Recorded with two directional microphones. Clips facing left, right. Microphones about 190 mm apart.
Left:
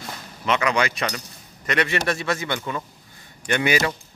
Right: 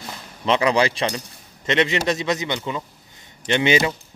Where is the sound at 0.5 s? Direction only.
30° right (ahead or behind).